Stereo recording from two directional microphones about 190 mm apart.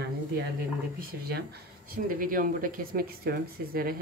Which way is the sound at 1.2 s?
55° right (ahead or behind).